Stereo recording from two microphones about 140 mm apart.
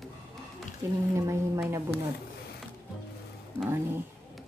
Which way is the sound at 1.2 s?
20° right (ahead or behind).